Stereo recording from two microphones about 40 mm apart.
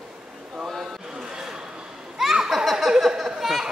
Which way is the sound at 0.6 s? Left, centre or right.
Centre.